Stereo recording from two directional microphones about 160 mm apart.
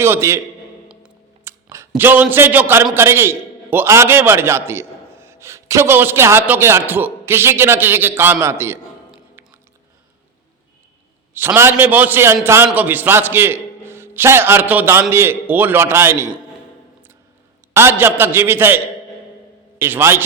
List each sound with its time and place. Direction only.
0.0 s a man's voice: 15° right (ahead or behind)
0.9 s music: 5° right (ahead or behind)
1.9 s a man's voice: 10° right (ahead or behind)
9.4 s music: 15° right (ahead or behind)
11.3 s a man's voice: 15° right (ahead or behind)
17.7 s a man's voice: 15° right (ahead or behind)
19.8 s a man's voice: 15° right (ahead or behind)